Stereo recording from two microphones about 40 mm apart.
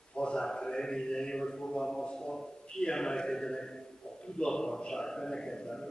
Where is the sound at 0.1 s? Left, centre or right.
Left.